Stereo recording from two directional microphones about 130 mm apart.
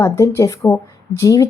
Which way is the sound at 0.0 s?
20° left (ahead or behind).